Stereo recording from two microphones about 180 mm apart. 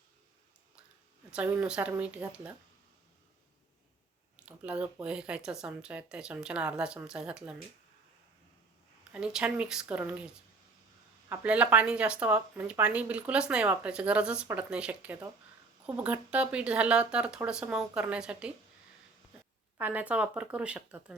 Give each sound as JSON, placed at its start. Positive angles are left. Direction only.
{"t": 1.3, "sound": "speech", "side_deg": -5}
{"t": 4.4, "sound": "speech", "side_deg": -5}
{"t": 9.1, "sound": "speech", "side_deg": -5}
{"t": 11.3, "sound": "speech", "side_deg": -5}
{"t": 19.8, "sound": "speech", "side_deg": -10}